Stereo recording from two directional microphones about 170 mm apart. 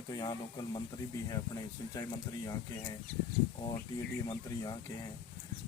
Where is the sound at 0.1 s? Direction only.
25° left (ahead or behind).